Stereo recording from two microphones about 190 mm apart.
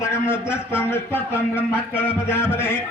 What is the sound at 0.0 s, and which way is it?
Speech, 10° left (ahead or behind).